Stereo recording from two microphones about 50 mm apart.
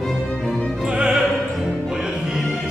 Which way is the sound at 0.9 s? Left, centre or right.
Centre.